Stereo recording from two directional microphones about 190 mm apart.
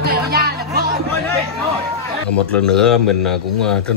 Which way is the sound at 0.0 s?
55° right (ahead or behind).